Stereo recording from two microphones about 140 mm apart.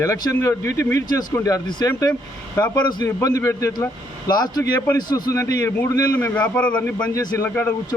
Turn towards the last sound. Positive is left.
turn(degrees=15)  # may be behind; listen again after turning